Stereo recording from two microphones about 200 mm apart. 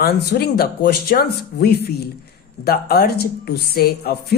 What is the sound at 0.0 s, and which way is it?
Speech, 50° left (ahead or behind).